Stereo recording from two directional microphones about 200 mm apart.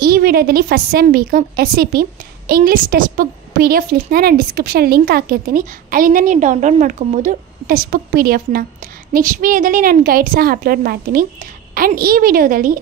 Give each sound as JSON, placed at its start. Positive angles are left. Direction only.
{"t": 0.0, "sound": "a woman's voice", "side_deg": -50}